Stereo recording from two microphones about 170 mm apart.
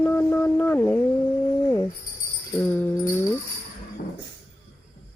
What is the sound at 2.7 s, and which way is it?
Music, 10° left (ahead or behind).